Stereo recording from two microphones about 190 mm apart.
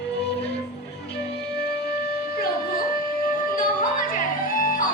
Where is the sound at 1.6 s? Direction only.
55° left (ahead or behind).